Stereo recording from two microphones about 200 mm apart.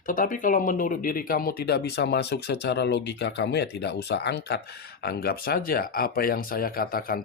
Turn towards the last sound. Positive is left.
turn(degrees=45)  # may be behind; listen again after turning